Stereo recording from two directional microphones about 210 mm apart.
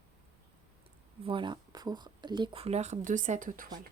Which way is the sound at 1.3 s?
20° right (ahead or behind).